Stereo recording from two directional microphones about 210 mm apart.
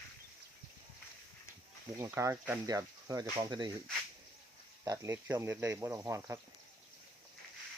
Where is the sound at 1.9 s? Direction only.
15° right (ahead or behind).